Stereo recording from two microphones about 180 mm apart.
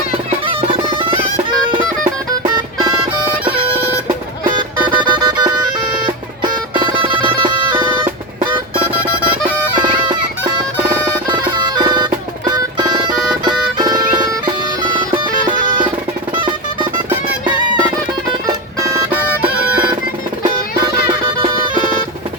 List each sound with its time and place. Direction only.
0.3 s music: 30° right (ahead or behind)
5.0 s music: 20° right (ahead or behind)
6.7 s music: 25° right (ahead or behind)
9.7 s music: 25° right (ahead or behind)